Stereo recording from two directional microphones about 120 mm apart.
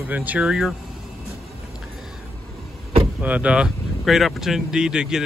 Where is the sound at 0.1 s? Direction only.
15° right (ahead or behind).